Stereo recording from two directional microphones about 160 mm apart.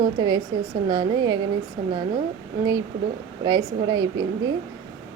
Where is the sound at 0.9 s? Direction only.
25° right (ahead or behind).